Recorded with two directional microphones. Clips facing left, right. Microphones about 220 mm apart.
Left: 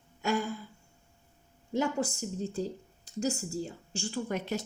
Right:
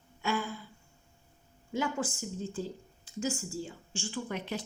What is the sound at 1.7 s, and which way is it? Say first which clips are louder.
Speech: left 3 dB; 40° left (ahead or behind).